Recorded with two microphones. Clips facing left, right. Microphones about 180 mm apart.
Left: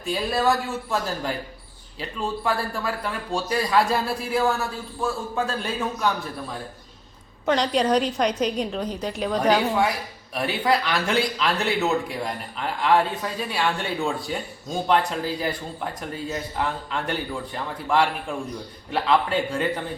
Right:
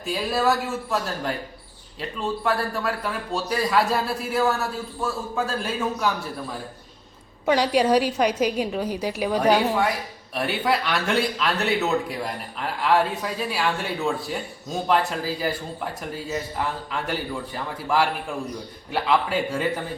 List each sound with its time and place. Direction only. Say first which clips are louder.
0.0 s speech: even; centre (ahead or behind)
7.4 s a woman's voice: right 2 dB; 10° right (ahead or behind)